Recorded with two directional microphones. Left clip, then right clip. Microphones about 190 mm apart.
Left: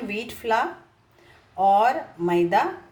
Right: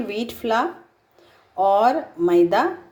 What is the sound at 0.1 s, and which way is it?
A woman's voice, 35° right (ahead or behind).